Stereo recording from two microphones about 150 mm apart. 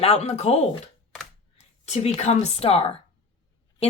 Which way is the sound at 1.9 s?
45° left (ahead or behind).